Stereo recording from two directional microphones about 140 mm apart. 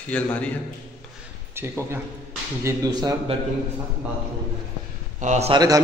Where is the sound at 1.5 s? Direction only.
15° right (ahead or behind).